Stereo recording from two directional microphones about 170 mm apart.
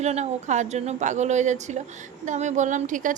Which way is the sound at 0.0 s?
40° right (ahead or behind).